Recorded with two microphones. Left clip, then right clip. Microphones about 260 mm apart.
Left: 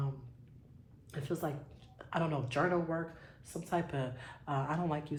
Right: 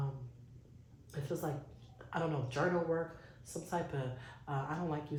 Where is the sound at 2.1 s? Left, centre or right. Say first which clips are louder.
Left 2 dB; left.